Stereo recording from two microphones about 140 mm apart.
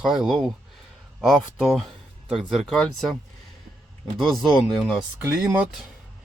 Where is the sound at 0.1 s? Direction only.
5° right (ahead or behind).